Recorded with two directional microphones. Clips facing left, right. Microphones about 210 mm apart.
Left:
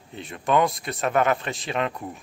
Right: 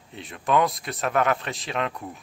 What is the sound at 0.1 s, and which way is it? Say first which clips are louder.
Speech: left 1 dB; centre (ahead or behind).